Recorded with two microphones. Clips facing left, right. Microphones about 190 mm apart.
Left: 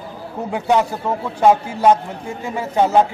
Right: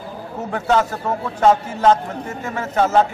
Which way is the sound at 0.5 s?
15° left (ahead or behind).